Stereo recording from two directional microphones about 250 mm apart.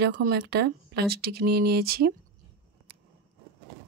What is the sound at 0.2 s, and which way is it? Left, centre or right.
Speech, right.